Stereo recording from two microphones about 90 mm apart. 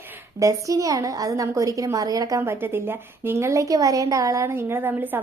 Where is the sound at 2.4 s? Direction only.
25° right (ahead or behind).